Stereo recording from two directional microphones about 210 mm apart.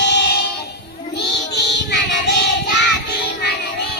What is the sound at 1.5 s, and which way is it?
Child singing, 55° left (ahead or behind).